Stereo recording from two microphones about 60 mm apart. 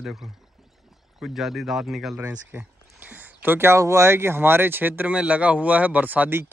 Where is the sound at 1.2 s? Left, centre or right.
Centre.